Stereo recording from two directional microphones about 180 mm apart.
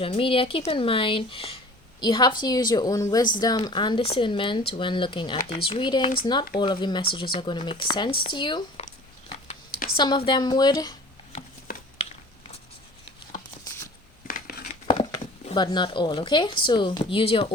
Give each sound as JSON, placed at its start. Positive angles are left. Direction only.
{"t": 0.0, "sound": "speech", "side_deg": 30}
{"t": 10.0, "sound": "speech", "side_deg": 25}
{"t": 11.7, "sound": "a sound", "side_deg": 60}
{"t": 14.3, "sound": "scissors", "side_deg": 55}
{"t": 15.5, "sound": "speech", "side_deg": 25}